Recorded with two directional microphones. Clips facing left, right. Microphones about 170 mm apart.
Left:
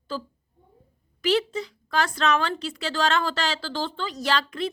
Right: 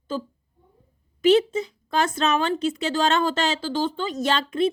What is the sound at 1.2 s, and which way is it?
A woman's voice, 25° right (ahead or behind).